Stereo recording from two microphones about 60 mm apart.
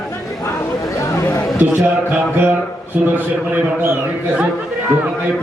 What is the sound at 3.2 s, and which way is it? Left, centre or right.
Speech, right.